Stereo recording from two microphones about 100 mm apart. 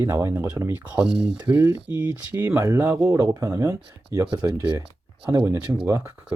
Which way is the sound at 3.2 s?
35° right (ahead or behind).